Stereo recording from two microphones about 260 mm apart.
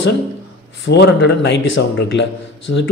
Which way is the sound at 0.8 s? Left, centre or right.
Left.